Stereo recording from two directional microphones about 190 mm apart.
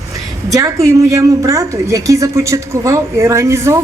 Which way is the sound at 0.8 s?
15° right (ahead or behind).